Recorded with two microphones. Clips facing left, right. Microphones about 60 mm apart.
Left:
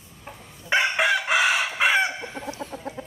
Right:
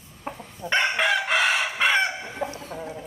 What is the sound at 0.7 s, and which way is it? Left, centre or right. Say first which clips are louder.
Chicken: left 1 dB; centre.